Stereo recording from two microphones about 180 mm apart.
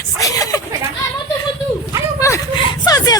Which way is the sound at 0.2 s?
20° left (ahead or behind).